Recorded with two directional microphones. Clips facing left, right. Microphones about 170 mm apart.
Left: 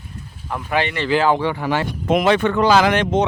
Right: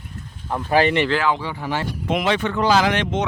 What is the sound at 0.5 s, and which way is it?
Speech, 35° right (ahead or behind).